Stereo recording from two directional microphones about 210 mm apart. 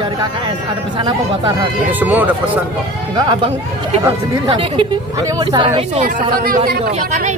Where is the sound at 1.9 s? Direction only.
10° right (ahead or behind).